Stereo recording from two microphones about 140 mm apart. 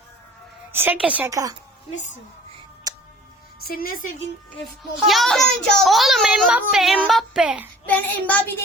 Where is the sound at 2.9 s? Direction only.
25° right (ahead or behind).